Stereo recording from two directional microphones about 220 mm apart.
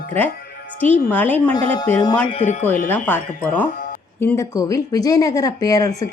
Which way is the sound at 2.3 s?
30° left (ahead or behind).